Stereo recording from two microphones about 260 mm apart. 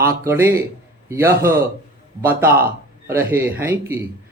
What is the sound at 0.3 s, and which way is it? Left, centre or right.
Speech, centre.